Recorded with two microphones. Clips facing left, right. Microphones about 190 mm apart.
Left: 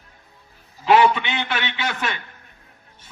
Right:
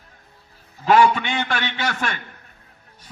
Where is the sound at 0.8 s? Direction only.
45° right (ahead or behind).